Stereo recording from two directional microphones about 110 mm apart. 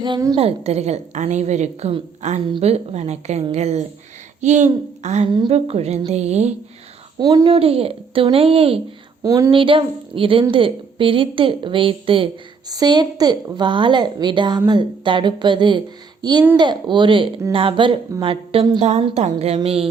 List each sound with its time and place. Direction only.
0.0 s a woman's voice: 40° right (ahead or behind)
0.3 s a woman's voice: 65° right (ahead or behind); by 2.4 s 90° right
2.6 s a woman's voice: 70° right (ahead or behind)
4.4 s a child's voice: 90° right
5.5 s a woman's voice: 70° right (ahead or behind)
7.2 s a woman's voice: 35° right (ahead or behind)
7.4 s speech: 60° right (ahead or behind)
9.2 s speech: 30° right (ahead or behind)
9.5 s a woman's voice: 50° right (ahead or behind)
12.6 s a woman's voice: 35° right (ahead or behind); by 18.6 s 55° right (ahead or behind)
18.8 s a woman's voice: 75° right (ahead or behind)
19.6 s speech: 60° right (ahead or behind)